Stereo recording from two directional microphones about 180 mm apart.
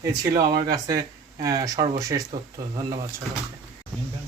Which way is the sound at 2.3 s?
30° right (ahead or behind).